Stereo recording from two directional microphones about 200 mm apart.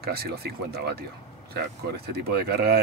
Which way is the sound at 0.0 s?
50° right (ahead or behind).